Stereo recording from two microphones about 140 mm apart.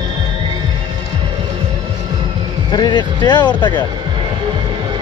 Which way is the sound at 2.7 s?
30° left (ahead or behind).